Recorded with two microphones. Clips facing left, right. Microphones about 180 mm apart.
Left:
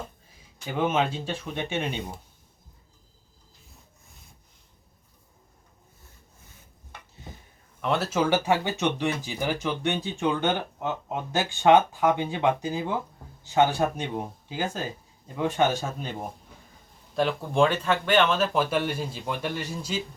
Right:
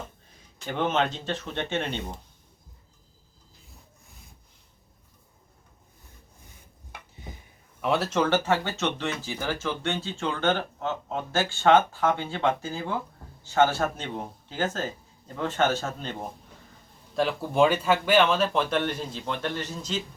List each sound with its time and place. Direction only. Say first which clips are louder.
0.6 s speech: left 1 dB; 5° left (ahead or behind)
7.8 s speech: even; centre (ahead or behind)
17.2 s speech: even; 5° right (ahead or behind)